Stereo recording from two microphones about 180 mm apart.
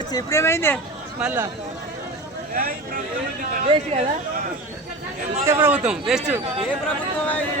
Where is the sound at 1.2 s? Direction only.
10° right (ahead or behind).